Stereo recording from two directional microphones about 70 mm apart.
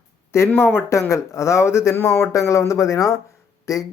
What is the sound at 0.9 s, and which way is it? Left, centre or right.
Speech, left.